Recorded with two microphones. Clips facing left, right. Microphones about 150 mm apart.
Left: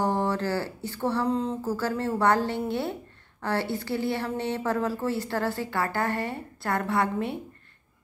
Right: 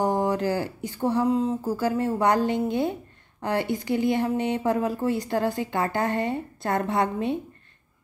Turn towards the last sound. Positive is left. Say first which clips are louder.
# right 2 dB
turn(degrees=-20)  # may be behind; listen again after turning